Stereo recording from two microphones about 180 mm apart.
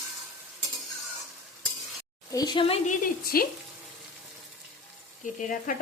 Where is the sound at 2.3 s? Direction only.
20° left (ahead or behind).